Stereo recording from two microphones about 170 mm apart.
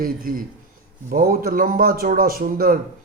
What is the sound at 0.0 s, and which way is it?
Speech, 55° right (ahead or behind).